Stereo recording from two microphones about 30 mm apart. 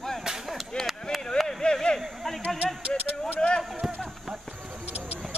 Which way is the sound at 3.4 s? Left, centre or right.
Left.